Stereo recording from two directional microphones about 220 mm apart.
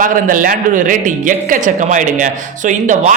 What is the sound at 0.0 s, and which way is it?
A man's voice, 40° right (ahead or behind).